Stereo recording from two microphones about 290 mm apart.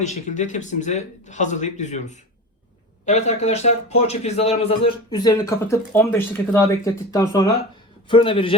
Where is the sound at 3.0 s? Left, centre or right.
Left.